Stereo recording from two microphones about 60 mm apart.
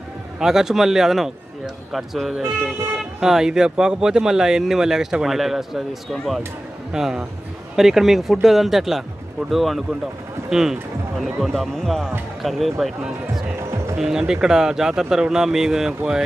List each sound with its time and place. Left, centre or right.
0.4 s a man's voice: centre
6.9 s a man's voice: centre
11.4 s a man's voice: centre
13.6 s music: right
13.9 s speech: centre